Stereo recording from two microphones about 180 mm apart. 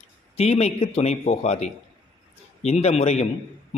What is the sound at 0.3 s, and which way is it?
A man's voice, 35° left (ahead or behind).